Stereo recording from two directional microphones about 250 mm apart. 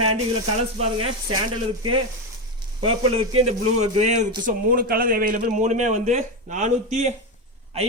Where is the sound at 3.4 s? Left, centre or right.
Right.